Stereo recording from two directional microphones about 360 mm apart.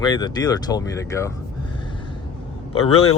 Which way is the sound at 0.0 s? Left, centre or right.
Centre.